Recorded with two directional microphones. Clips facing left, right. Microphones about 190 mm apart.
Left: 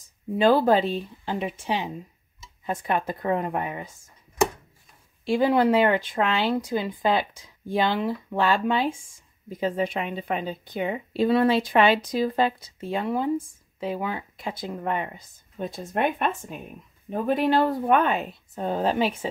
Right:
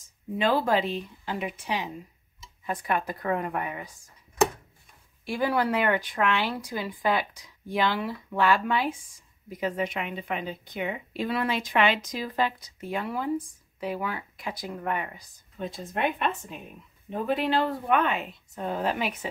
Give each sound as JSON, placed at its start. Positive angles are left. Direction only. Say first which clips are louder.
{"t": 0.4, "sound": "speech", "louder": "left 5 dB", "side_deg": 35}
{"t": 5.2, "sound": "speech", "louder": "left 6 dB", "side_deg": 25}
{"t": 15.6, "sound": "speech", "louder": "left 3 dB", "side_deg": 45}